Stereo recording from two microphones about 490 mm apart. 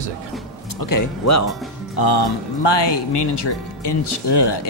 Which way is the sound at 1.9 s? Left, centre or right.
Left.